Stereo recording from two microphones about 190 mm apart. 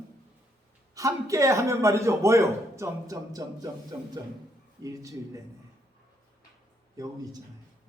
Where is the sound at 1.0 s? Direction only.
15° right (ahead or behind).